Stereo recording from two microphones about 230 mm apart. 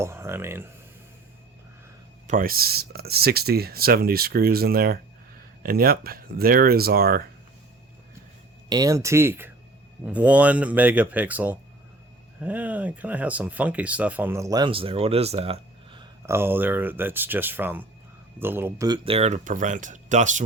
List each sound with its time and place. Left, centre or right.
0.0 s speech: centre
2.2 s speech: right
8.7 s speech: centre; by 20.4 s right